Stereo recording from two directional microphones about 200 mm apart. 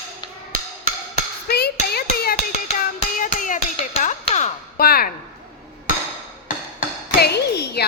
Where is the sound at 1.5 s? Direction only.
55° left (ahead or behind).